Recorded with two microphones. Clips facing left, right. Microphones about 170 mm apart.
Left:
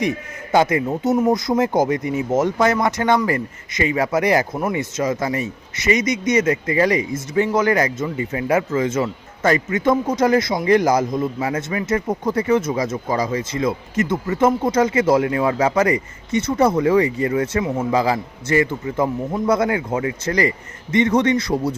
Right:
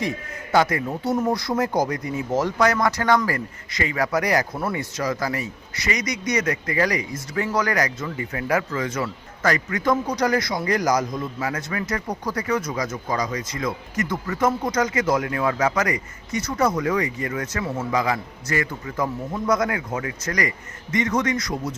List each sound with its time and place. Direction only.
0.5 s speech: 20° left (ahead or behind)